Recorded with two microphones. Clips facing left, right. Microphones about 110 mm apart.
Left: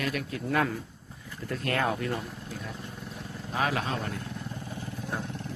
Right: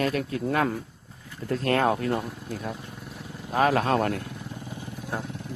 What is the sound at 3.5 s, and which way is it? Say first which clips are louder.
Speech: right 8 dB; 45° right (ahead or behind).